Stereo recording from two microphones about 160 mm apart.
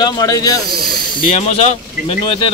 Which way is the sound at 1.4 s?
40° left (ahead or behind).